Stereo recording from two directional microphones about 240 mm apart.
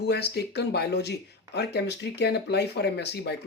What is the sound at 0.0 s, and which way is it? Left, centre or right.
Speech, left.